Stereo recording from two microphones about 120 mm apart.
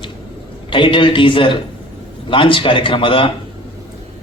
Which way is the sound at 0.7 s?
45° left (ahead or behind).